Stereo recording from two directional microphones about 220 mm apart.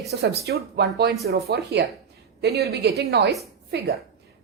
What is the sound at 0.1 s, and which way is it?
A woman's voice, 45° right (ahead or behind).